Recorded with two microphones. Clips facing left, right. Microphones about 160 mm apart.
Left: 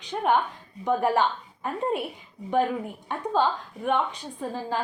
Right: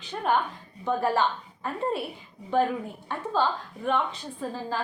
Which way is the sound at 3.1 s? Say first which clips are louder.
Left 2 dB; 15° left (ahead or behind).